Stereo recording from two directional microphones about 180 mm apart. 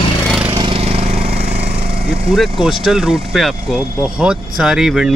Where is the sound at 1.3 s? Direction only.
65° right (ahead or behind).